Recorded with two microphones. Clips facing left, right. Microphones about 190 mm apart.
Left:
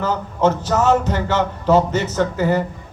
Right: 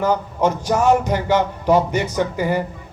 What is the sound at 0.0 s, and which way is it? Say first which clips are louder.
Speech: even; 10° right (ahead or behind).